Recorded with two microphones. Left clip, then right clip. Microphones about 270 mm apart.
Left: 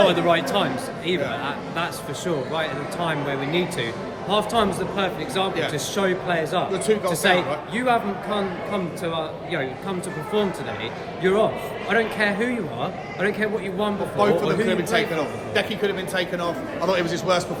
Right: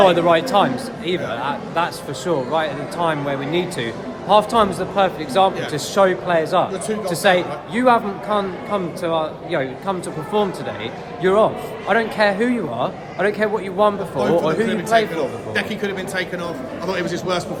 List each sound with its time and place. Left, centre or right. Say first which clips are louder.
0.1 s a man's voice: right 5 dB; centre
14.2 s a man's voice: right 2 dB; left
15.8 s a man's voice: even; centre